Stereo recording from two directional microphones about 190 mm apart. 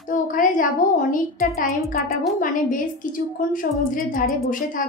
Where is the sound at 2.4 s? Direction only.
45° left (ahead or behind).